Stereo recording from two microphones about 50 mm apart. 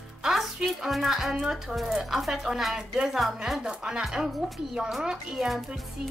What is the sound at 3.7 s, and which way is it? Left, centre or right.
A woman's voice, centre.